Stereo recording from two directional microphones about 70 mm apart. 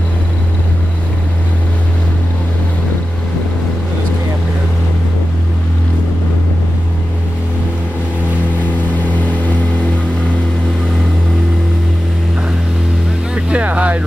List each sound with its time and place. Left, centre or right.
13.3 s vehicle: centre